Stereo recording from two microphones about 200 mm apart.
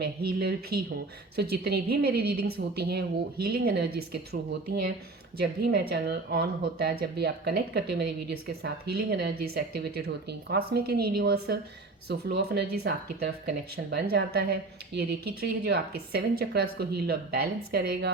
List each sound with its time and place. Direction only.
0.0 s a woman's voice: 50° right (ahead or behind)